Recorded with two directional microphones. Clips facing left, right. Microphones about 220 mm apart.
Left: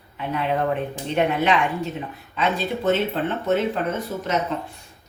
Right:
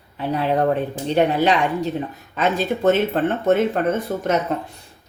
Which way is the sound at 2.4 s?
50° right (ahead or behind).